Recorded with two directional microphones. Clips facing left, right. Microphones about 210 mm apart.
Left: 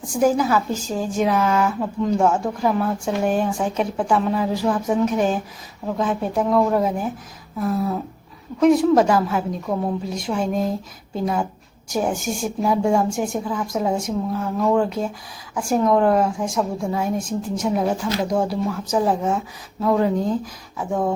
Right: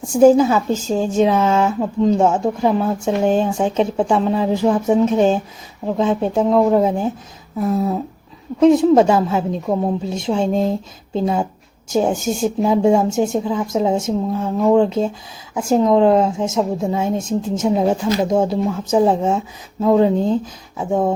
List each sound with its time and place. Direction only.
0.1 s a woman's voice: 25° right (ahead or behind)